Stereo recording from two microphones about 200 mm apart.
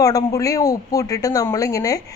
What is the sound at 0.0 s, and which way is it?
Speech, 20° left (ahead or behind).